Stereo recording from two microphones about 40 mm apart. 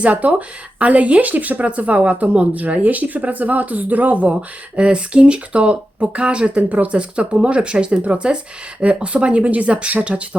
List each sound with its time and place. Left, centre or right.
0.0 s speech: right
4.4 s speech: right